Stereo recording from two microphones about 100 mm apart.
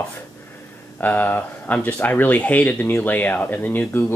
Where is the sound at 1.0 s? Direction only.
20° left (ahead or behind).